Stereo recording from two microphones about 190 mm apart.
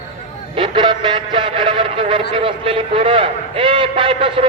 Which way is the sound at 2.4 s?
30° right (ahead or behind).